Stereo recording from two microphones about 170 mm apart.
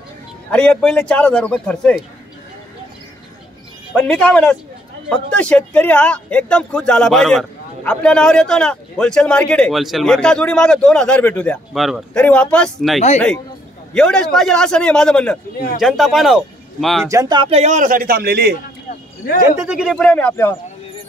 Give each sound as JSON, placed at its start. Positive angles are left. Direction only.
{"t": 0.5, "sound": "a man's voice", "side_deg": 5}
{"t": 3.9, "sound": "a man's voice", "side_deg": 5}
{"t": 17.0, "sound": "speech", "side_deg": -20}
{"t": 19.6, "sound": "a man's voice", "side_deg": -5}